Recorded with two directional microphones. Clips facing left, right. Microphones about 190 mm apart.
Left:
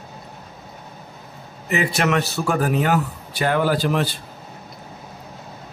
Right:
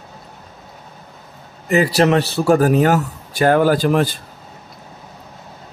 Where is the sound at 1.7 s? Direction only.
35° right (ahead or behind).